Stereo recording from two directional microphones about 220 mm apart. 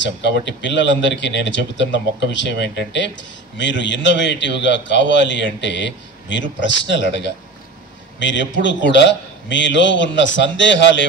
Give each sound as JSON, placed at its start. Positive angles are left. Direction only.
{"t": 0.2, "sound": "a man's voice", "side_deg": 55}
{"t": 9.5, "sound": "a man's voice", "side_deg": 55}